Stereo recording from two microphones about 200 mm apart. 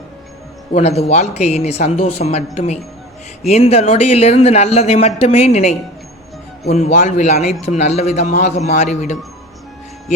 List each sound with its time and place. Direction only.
0.7 s speech: 30° left (ahead or behind)
3.4 s speech: 35° left (ahead or behind)